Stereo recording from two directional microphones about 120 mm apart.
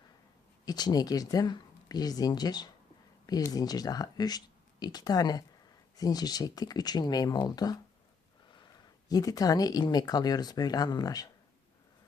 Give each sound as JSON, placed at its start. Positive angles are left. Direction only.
{"t": 0.6, "sound": "speech", "side_deg": 35}
{"t": 9.0, "sound": "speech", "side_deg": 30}